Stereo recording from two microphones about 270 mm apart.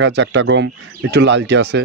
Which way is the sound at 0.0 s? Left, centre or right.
Right.